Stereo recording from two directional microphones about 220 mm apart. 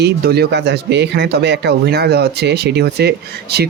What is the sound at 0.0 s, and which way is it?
Speech, 45° right (ahead or behind).